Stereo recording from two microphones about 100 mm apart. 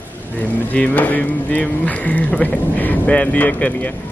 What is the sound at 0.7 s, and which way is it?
Speech, 15° left (ahead or behind).